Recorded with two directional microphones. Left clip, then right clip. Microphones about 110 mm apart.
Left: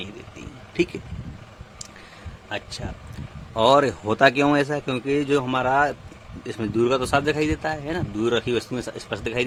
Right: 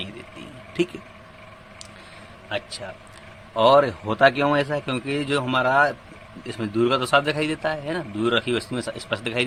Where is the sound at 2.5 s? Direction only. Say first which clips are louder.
Right 2 dB; 50° left (ahead or behind).